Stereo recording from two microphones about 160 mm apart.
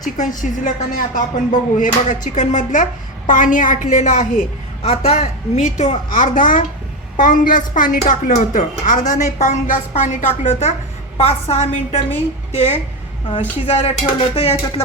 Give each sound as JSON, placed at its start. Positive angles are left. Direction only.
{"t": 0.0, "sound": "a woman's voice", "side_deg": 50}